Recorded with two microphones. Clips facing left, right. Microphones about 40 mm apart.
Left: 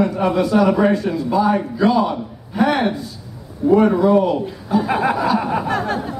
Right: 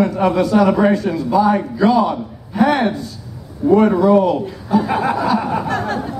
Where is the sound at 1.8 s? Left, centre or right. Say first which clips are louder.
Right 2 dB; centre.